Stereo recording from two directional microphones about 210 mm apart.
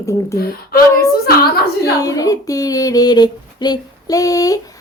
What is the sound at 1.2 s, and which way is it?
Speech, 45° left (ahead or behind).